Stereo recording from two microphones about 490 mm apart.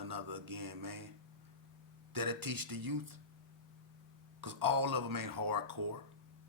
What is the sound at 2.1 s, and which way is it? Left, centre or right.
Speech, right.